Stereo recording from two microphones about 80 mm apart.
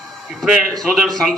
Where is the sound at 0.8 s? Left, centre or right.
Centre.